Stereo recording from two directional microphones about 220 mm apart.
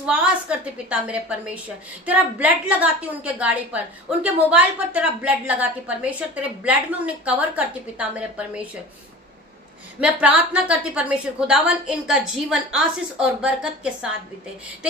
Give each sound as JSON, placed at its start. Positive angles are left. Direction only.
{"t": 0.0, "sound": "a woman's voice", "side_deg": -5}
{"t": 9.9, "sound": "a woman's voice", "side_deg": -5}